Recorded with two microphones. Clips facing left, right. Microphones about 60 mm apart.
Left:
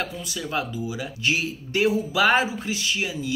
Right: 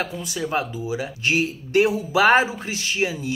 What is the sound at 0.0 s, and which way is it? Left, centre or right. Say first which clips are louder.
Speech: right 3 dB; right.